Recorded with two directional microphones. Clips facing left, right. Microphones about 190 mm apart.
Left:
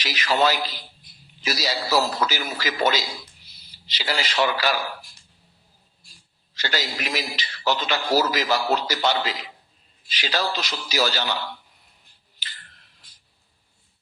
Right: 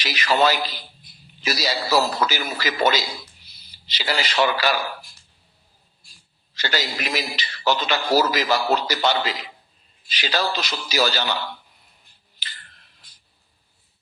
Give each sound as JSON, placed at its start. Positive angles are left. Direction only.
{"t": 0.0, "sound": "a man's voice", "side_deg": -65}
{"t": 6.6, "sound": "a man's voice", "side_deg": -65}
{"t": 12.4, "sound": "a sound", "side_deg": -65}